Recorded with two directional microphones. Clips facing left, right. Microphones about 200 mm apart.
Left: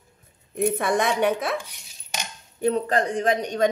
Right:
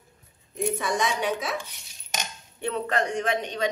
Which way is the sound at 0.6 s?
60° left (ahead or behind).